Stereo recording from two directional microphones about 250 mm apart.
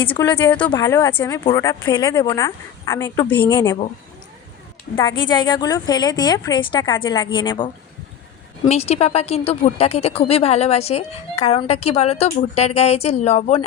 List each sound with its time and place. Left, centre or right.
0.1 s a woman's voice: centre
4.9 s a woman's voice: centre
8.7 s speech: left